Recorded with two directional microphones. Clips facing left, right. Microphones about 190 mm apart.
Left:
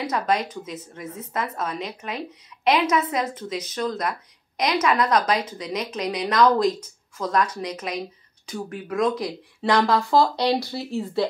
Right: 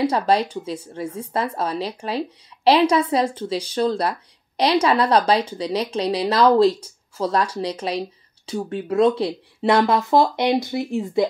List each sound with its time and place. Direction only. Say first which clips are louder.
0.0 s a woman's voice: right 5 dB; 30° right (ahead or behind)